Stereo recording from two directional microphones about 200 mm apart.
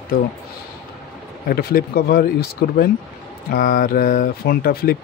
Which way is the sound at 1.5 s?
50° left (ahead or behind).